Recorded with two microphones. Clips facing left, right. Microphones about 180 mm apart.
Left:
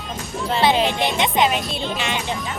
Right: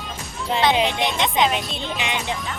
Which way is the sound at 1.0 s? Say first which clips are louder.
Left 1 dB; 5° left (ahead or behind).